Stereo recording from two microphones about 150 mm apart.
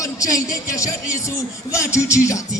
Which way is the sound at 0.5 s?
20° left (ahead or behind).